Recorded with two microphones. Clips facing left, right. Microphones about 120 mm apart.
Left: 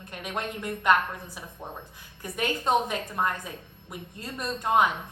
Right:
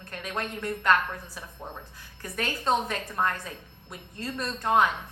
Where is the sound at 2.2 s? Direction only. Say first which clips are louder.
Left 2 dB; 15° left (ahead or behind).